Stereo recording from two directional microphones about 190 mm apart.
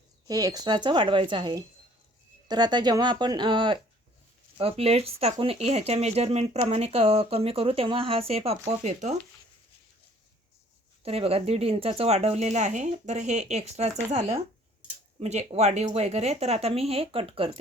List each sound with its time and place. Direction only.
0.3 s a woman's voice: 20° right (ahead or behind); by 9.1 s 35° right (ahead or behind)
11.0 s speech: 30° right (ahead or behind)